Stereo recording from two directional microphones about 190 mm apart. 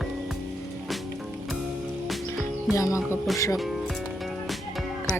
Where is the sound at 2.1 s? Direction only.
Centre (ahead or behind).